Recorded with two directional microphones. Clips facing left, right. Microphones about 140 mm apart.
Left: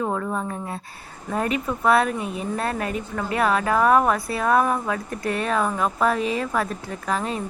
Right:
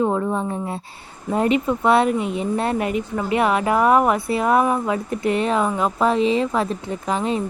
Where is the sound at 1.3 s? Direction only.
25° right (ahead or behind).